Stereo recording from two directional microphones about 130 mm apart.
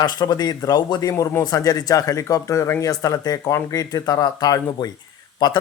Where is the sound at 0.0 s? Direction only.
30° left (ahead or behind).